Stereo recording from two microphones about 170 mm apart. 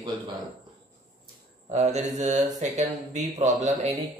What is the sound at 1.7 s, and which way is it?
Speech, 45° right (ahead or behind).